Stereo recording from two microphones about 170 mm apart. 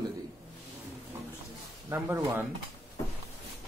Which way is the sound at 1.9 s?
20° right (ahead or behind).